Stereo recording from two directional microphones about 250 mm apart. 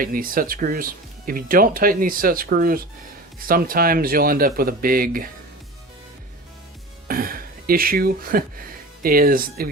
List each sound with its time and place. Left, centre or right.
0.0 s speech: right
7.1 s speech: right